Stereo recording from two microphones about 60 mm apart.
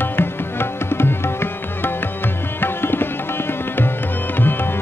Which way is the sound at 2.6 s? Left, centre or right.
Left.